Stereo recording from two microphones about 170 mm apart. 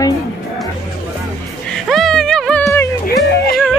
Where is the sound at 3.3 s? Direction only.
70° left (ahead or behind).